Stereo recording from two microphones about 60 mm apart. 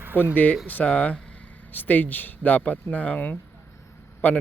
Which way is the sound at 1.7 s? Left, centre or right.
Left.